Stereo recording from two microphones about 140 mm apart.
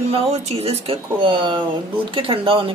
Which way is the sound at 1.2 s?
35° right (ahead or behind).